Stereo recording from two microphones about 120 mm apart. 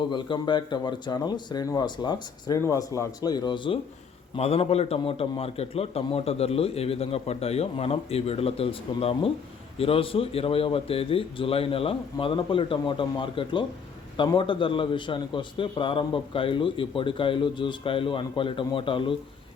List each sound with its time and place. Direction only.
0.1 s speech: 40° left (ahead or behind)
2.6 s speech: 25° left (ahead or behind); by 3.8 s 40° left (ahead or behind)
4.4 s a man's voice: 55° left (ahead or behind)